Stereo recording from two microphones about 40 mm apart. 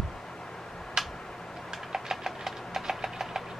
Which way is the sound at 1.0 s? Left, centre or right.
Centre.